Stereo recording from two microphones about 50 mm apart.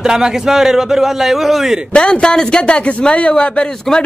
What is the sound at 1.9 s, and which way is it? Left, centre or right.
A man's voice, centre.